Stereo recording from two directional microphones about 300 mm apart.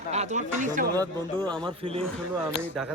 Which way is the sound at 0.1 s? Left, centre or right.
Right.